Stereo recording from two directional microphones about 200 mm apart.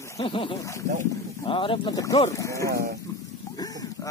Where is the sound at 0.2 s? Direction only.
25° left (ahead or behind).